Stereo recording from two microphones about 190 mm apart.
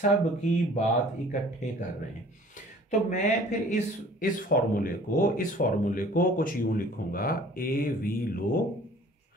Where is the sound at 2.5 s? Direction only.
40° left (ahead or behind).